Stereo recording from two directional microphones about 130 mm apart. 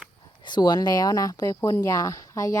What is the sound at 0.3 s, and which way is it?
Speech, 35° left (ahead or behind).